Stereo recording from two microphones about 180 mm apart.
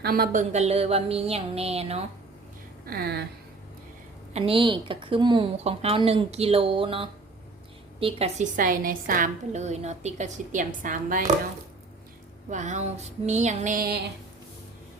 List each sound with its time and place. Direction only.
0.0 s speech: 55° right (ahead or behind)
0.5 s a woman's voice: 35° right (ahead or behind)
2.8 s speech: 60° right (ahead or behind)
4.4 s a woman's voice: 30° right (ahead or behind)
8.5 s a woman's voice: 50° right (ahead or behind)
12.5 s a woman's voice: 40° right (ahead or behind)